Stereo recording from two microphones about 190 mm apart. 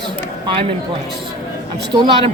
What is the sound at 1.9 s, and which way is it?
Speech, 25° right (ahead or behind).